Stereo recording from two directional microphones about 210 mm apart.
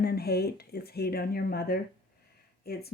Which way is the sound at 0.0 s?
50° left (ahead or behind).